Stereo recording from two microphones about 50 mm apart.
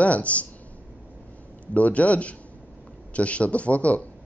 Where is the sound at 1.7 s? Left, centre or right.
Left.